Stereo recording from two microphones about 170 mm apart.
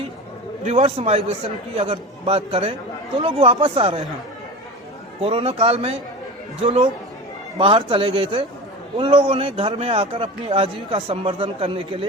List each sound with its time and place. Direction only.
0.6 s a man's voice: 40° right (ahead or behind)
5.2 s a man's voice: 35° right (ahead or behind)